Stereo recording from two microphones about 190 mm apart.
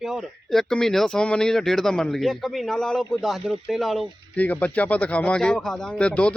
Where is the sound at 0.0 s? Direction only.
Centre (ahead or behind).